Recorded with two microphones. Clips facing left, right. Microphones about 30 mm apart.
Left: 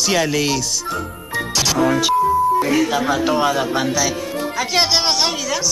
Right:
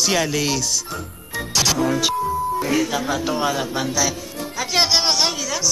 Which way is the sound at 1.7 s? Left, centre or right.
Left.